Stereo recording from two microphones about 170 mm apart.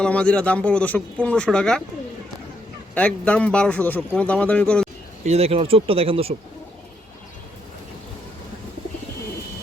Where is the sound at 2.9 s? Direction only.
5° left (ahead or behind).